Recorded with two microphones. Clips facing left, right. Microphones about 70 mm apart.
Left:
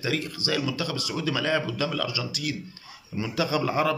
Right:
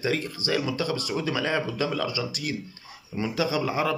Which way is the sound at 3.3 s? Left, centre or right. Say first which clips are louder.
Left 1 dB; centre.